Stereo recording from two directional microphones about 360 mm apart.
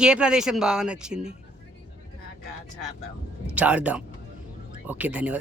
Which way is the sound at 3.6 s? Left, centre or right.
Centre.